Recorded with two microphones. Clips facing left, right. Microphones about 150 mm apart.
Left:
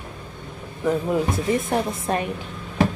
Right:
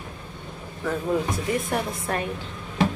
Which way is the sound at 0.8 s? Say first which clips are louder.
Left 3 dB; 20° left (ahead or behind).